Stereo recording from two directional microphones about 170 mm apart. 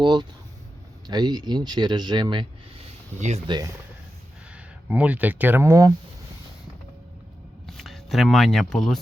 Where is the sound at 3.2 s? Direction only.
45° right (ahead or behind).